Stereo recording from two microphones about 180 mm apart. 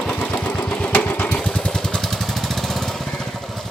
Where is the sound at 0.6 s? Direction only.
5° left (ahead or behind).